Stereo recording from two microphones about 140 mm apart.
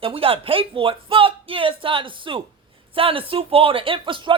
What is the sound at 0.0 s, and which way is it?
Speech, 40° right (ahead or behind).